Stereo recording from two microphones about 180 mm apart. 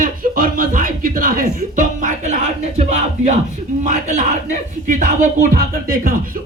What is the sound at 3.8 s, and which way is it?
Speech, 40° right (ahead or behind).